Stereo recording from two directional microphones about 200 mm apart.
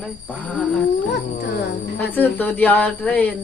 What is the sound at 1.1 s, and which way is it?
Speech, 60° left (ahead or behind).